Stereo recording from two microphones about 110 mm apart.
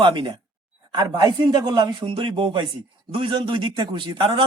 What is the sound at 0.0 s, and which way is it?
A man's voice, 45° right (ahead or behind).